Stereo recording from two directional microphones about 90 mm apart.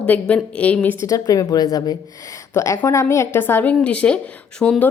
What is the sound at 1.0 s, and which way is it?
A woman's voice, 40° left (ahead or behind).